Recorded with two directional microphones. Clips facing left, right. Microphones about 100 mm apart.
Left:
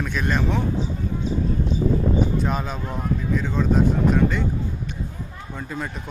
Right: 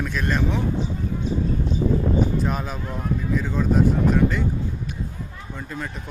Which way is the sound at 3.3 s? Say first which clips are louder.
Even; 5° right (ahead or behind).